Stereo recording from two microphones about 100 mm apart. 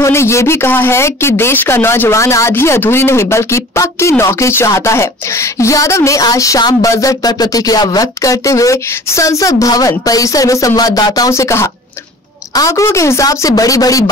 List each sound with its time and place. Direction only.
0.0 s speech: 25° left (ahead or behind)